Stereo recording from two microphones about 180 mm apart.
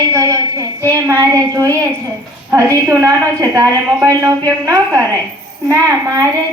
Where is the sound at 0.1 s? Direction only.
20° right (ahead or behind).